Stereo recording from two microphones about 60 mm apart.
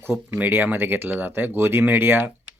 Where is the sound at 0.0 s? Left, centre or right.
Right.